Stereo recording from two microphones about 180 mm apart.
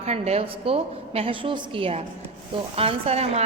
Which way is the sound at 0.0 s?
35° right (ahead or behind).